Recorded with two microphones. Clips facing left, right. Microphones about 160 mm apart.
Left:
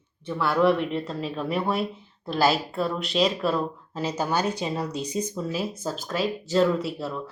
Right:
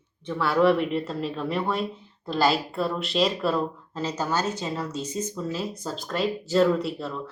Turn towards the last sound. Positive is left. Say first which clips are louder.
# right 1 dB
turn(degrees=0)  # may be behind; listen again after turning